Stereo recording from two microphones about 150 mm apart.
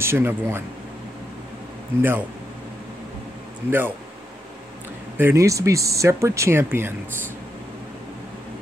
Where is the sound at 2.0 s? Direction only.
15° right (ahead or behind).